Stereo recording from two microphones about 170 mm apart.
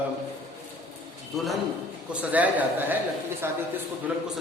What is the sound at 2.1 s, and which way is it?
Speech, 10° right (ahead or behind).